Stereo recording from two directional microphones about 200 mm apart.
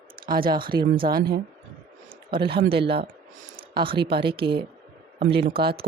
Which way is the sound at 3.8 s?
25° right (ahead or behind).